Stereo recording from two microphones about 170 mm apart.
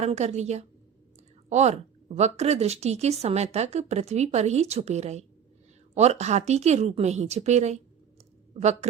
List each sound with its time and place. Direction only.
0.0 s a woman's voice: 40° right (ahead or behind)